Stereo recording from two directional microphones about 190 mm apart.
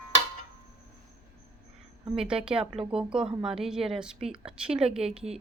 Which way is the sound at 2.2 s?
5° right (ahead or behind).